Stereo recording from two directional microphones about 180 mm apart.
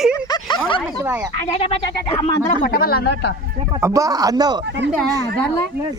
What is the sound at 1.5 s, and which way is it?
Speech, 30° left (ahead or behind).